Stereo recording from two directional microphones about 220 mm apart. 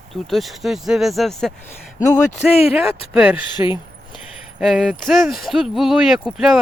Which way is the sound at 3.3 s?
20° left (ahead or behind).